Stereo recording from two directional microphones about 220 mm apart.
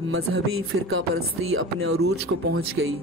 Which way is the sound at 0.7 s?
65° right (ahead or behind).